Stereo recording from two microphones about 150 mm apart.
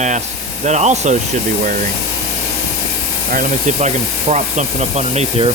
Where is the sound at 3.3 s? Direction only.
60° right (ahead or behind); by 5.5 s 45° right (ahead or behind).